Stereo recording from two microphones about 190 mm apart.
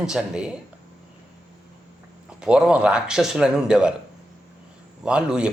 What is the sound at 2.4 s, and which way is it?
Speech, 5° right (ahead or behind).